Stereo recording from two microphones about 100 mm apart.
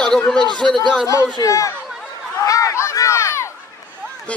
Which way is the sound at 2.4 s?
35° left (ahead or behind).